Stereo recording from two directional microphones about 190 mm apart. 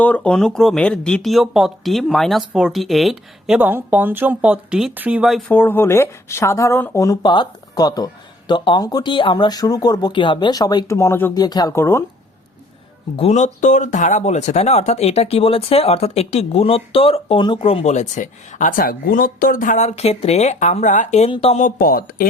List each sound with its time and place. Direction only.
0.0 s speech: 5° left (ahead or behind)
13.1 s speech: 35° left (ahead or behind)
21.6 s speech: 50° left (ahead or behind)